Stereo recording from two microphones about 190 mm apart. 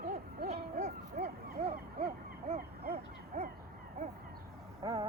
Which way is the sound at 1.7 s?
50° right (ahead or behind).